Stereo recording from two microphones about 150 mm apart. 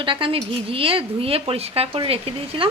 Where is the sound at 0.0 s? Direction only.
35° right (ahead or behind).